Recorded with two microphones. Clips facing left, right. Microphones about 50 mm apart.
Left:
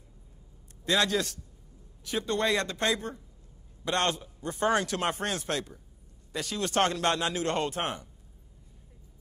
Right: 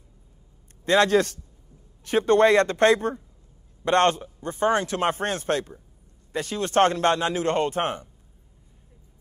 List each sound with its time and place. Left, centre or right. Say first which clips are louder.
0.8 s speech: right 8 dB; right
4.5 s speech: right 4 dB; centre